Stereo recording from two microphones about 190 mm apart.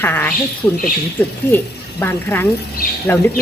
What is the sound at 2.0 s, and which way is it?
Speech, 10° left (ahead or behind).